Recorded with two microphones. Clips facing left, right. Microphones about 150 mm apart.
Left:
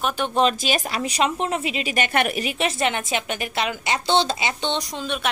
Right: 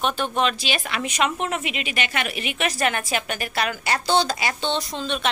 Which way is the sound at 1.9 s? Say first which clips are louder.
Left 7 dB; 50° left (ahead or behind).